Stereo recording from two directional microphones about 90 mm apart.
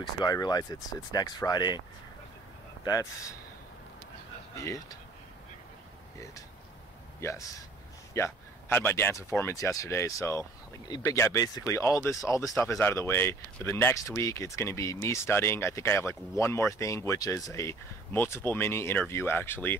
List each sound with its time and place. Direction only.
0.0 s speech: 50° left (ahead or behind)
2.8 s speech: 40° left (ahead or behind)
4.6 s speech: 35° left (ahead or behind)
7.2 s speech: 30° left (ahead or behind)
10.9 s speech: 45° left (ahead or behind); by 19.8 s 20° left (ahead or behind)